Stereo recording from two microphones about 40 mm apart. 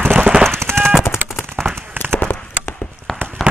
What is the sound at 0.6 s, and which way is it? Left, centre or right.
Machine gun, right.